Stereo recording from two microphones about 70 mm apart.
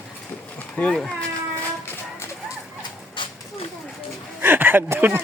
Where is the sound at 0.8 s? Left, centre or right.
Centre.